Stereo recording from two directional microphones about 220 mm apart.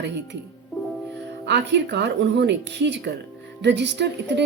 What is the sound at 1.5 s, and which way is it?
Speech, 55° right (ahead or behind).